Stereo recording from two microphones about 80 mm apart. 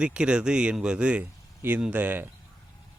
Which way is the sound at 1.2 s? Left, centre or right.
Right.